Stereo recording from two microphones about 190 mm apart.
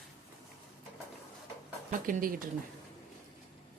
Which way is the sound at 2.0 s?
45° right (ahead or behind).